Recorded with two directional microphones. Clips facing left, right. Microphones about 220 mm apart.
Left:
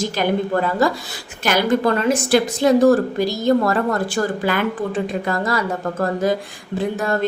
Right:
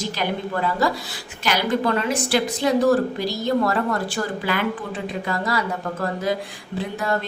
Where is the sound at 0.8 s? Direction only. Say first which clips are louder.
Left 4 dB; 50° left (ahead or behind).